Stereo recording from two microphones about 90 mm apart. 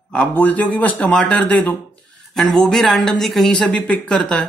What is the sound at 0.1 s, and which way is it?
A woman's voice, 15° left (ahead or behind).